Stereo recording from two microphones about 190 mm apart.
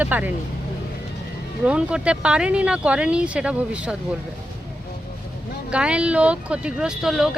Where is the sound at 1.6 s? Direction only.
5° right (ahead or behind).